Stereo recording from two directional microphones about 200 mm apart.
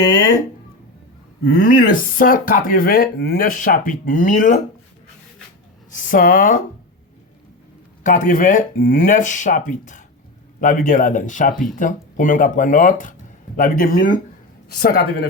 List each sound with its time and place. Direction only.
1.6 s speech: 45° left (ahead or behind)
5.9 s speech: 45° left (ahead or behind)
8.0 s speech: 40° left (ahead or behind)